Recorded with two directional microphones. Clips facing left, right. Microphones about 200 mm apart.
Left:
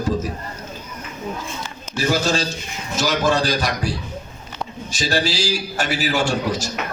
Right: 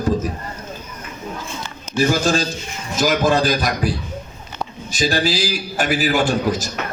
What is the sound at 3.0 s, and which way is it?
A man's voice, 50° right (ahead or behind).